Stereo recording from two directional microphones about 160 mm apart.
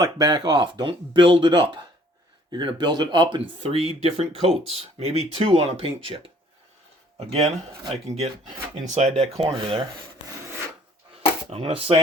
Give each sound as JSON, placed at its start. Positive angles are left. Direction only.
{"t": 0.0, "sound": "speech", "side_deg": -25}
{"t": 7.2, "sound": "speech", "side_deg": -40}
{"t": 9.5, "sound": "speech", "side_deg": -30}
{"t": 11.4, "sound": "speech", "side_deg": -40}